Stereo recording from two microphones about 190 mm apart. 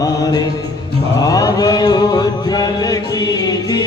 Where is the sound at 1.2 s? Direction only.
20° left (ahead or behind).